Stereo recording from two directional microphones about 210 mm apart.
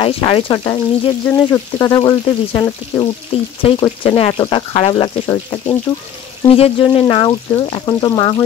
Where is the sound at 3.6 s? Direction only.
25° left (ahead or behind).